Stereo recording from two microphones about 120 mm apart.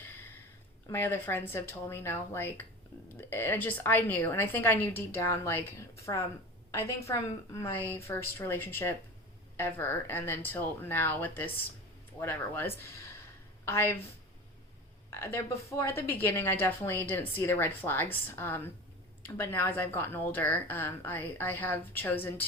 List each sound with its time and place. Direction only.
0.0 s a sound: 15° left (ahead or behind)
0.9 s a woman's voice: 15° left (ahead or behind)
15.1 s a woman's voice: 20° left (ahead or behind)